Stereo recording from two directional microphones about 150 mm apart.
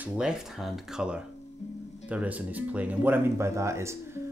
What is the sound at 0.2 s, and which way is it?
Speech, 5° right (ahead or behind).